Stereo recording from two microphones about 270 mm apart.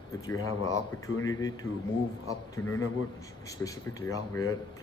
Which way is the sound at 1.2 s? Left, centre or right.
Centre.